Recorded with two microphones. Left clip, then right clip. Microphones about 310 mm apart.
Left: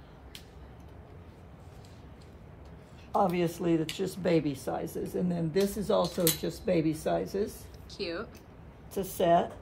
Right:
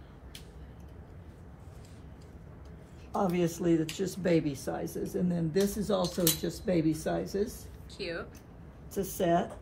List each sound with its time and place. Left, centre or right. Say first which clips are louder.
3.1 s speech: left 3 dB; centre